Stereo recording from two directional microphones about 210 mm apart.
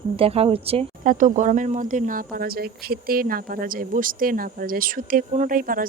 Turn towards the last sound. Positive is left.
turn(degrees=-40)  # may be behind; listen again after turning